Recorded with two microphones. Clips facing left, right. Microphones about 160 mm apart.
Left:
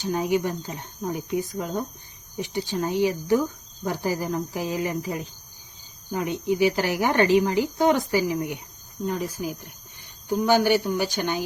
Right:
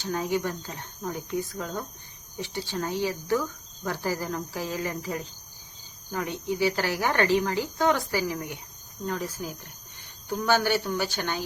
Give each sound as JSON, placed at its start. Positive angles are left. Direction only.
{"t": 0.0, "sound": "speech", "side_deg": 15}